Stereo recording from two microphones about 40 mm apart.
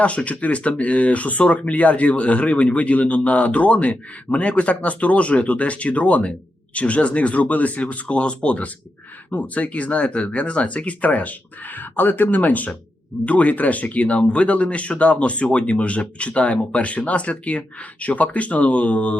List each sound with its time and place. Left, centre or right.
0.3 s speech: left